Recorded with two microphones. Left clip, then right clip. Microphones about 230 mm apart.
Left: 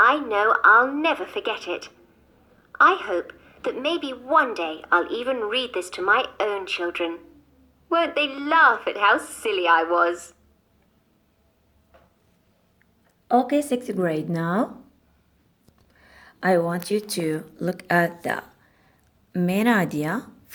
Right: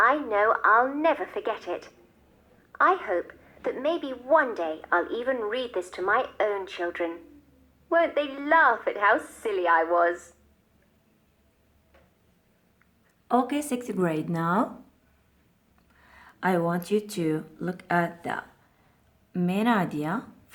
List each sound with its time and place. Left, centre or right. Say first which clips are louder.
0.0 s a woman's voice: left 3 dB; left
13.2 s speech: left 5 dB; centre
16.0 s speech: left 2 dB; centre